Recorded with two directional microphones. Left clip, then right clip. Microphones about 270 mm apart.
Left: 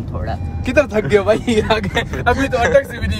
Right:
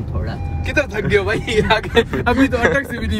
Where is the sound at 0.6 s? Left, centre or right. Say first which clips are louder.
Left 4 dB; left.